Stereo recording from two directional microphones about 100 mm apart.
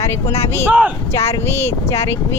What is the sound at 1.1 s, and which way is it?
Speech, 30° left (ahead or behind).